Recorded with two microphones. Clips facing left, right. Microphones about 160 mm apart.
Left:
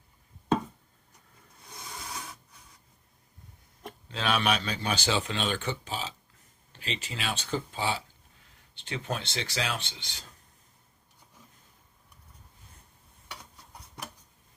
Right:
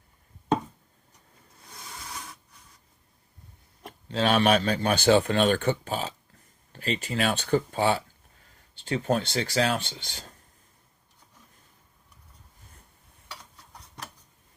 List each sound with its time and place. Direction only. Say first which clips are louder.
2.1 s printer: even; 5° left (ahead or behind)
4.1 s a man's voice: right 6 dB; 40° right (ahead or behind)
8.7 s a man's voice: right 9 dB; 45° right (ahead or behind)